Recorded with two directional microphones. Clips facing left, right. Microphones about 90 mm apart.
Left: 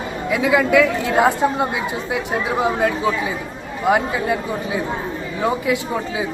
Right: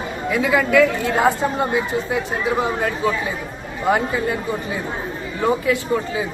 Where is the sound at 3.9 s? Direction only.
10° left (ahead or behind).